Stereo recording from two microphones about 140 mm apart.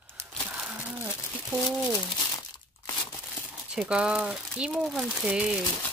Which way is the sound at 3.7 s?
5° right (ahead or behind).